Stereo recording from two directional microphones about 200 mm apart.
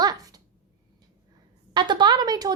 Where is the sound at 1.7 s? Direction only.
20° right (ahead or behind).